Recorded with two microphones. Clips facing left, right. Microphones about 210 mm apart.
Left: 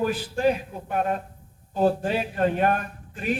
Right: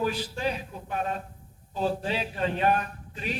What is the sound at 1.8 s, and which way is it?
Speech, 50° left (ahead or behind).